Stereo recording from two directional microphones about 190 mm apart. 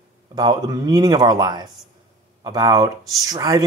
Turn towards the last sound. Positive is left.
turn(degrees=-20)  # may be behind; listen again after turning